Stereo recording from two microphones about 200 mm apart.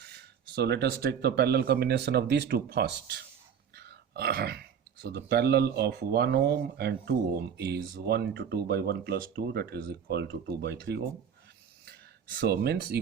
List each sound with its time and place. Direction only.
0.0 s speech: 55° right (ahead or behind)
12.4 s speech: 55° right (ahead or behind)